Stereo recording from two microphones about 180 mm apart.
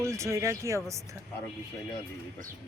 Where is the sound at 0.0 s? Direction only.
15° right (ahead or behind).